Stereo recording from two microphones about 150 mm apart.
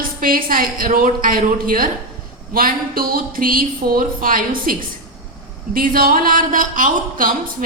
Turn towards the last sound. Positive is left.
turn(degrees=-65)  # may be behind; listen again after turning